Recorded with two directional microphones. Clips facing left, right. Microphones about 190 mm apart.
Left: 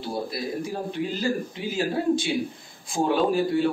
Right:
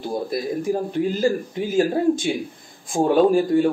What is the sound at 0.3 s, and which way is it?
A man's voice, 50° right (ahead or behind).